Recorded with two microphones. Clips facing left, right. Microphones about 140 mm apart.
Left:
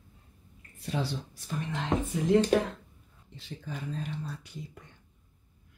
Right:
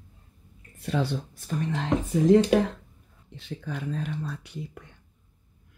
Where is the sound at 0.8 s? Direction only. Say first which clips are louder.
Right 5 dB; 60° right (ahead or behind).